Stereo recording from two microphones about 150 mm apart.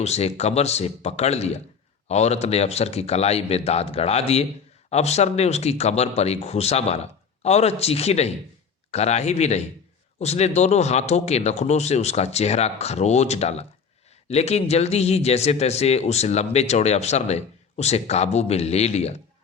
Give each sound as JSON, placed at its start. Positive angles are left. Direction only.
{"t": 0.0, "sound": "a man's voice", "side_deg": 45}